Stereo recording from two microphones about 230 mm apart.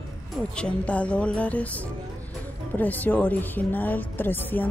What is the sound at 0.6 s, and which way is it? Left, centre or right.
Speech, centre.